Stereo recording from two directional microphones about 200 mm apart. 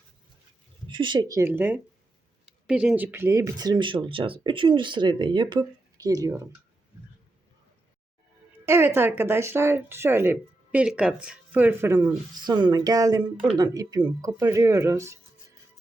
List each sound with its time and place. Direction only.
0.9 s speech: 25° right (ahead or behind)
8.6 s speech: 10° right (ahead or behind)